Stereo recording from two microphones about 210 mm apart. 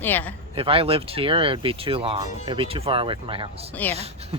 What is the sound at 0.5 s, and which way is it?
Speech, 25° right (ahead or behind).